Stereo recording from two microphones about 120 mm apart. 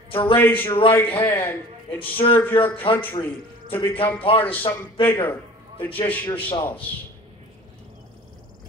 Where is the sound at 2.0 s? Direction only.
45° left (ahead or behind).